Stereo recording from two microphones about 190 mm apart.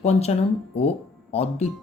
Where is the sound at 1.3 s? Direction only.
35° left (ahead or behind).